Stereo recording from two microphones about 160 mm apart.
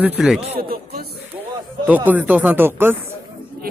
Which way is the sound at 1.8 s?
10° right (ahead or behind).